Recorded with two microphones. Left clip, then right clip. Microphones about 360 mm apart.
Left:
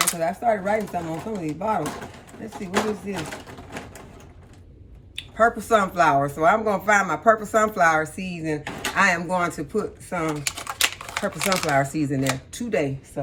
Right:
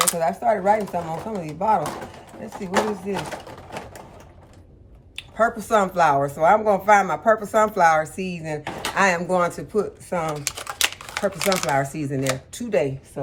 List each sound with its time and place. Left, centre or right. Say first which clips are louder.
0.0 s speech: right 2 dB; centre
5.1 s speech: left 1 dB; centre